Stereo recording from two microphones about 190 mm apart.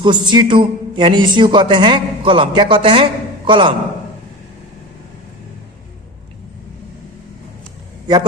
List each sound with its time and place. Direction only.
0.0 s a man's voice: 25° right (ahead or behind)